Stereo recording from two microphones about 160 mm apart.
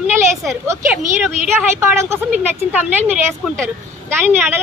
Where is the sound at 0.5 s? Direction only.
15° right (ahead or behind).